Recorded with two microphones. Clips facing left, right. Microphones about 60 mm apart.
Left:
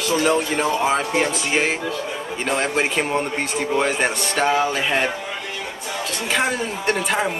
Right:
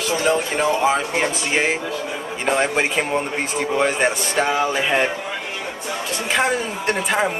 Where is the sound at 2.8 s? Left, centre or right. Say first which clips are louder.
Even; centre.